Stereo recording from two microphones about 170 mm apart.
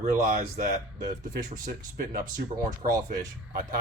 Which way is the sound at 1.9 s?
55° right (ahead or behind).